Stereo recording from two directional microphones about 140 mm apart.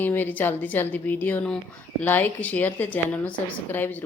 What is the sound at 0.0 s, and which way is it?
Speech, 15° left (ahead or behind).